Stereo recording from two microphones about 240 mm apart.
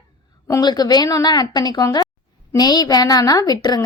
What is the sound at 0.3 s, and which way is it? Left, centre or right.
A woman's voice, centre.